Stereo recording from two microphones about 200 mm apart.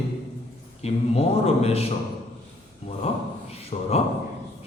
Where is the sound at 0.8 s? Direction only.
30° left (ahead or behind).